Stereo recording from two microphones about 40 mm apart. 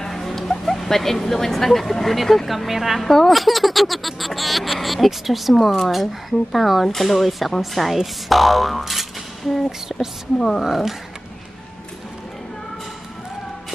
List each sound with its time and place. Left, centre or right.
0.0 s speech: centre
9.9 s a woman's voice: centre
10.6 s speech: centre